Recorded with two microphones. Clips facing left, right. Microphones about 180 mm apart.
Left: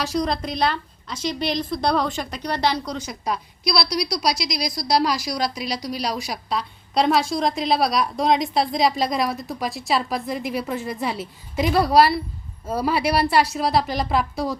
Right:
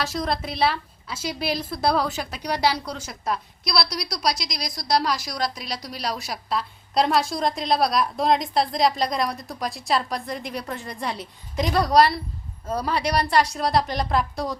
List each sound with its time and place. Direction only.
0.0 s a woman's voice: centre (ahead or behind)